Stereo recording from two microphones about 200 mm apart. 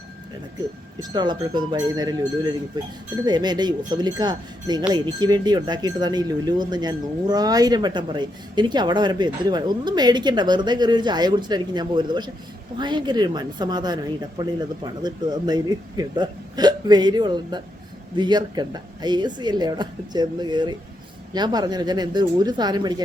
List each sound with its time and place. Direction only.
1.1 s speech: 20° right (ahead or behind)